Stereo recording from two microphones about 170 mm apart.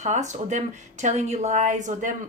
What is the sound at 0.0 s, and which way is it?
Speech, 45° right (ahead or behind).